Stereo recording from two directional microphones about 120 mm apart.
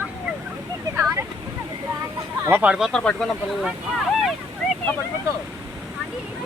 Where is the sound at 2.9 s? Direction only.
5° left (ahead or behind).